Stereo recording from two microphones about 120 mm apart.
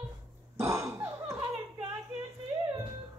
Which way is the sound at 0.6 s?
25° right (ahead or behind).